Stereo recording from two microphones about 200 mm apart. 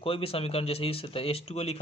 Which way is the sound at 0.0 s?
30° left (ahead or behind).